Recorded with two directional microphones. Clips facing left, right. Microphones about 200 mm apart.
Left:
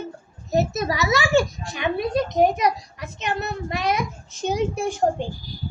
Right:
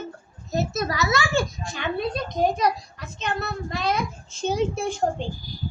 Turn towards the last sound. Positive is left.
turn(degrees=10)  # may be behind; listen again after turning